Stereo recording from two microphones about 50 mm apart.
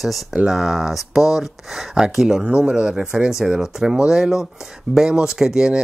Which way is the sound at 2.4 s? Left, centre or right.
Right.